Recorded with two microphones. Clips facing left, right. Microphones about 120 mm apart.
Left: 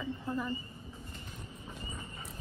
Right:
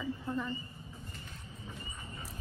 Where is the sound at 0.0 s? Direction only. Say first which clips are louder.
Even; centre (ahead or behind).